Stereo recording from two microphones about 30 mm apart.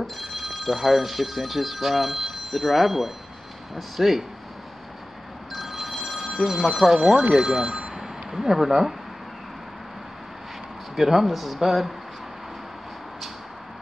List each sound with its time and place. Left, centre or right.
0.0 s speech: centre
5.5 s telephone bell ringing: centre
6.2 s a sound: centre
6.6 s speech: centre
6.9 s speech: centre
7.9 s a sound: centre
11.0 s speech: centre